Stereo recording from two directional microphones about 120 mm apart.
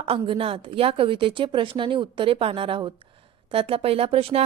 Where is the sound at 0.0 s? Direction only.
50° right (ahead or behind).